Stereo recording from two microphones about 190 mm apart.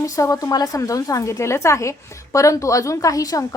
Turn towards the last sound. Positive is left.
turn(degrees=20)  # may be behind; listen again after turning